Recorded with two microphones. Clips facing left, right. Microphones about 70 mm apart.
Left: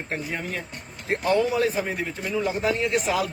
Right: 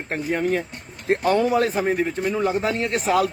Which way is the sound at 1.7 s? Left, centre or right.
Right.